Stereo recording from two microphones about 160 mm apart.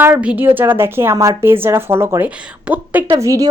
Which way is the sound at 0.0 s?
10° right (ahead or behind).